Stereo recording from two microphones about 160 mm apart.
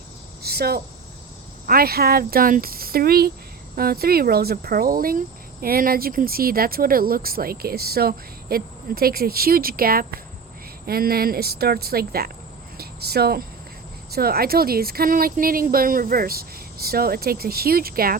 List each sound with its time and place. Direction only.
0.4 s cricket: 75° right (ahead or behind)
1.6 s speech: 70° right (ahead or behind)
12.7 s cricket: 80° right
14.1 s speech: 70° right (ahead or behind)